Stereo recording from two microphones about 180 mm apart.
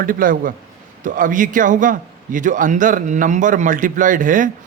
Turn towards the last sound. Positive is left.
turn(degrees=-45)  # may be behind; listen again after turning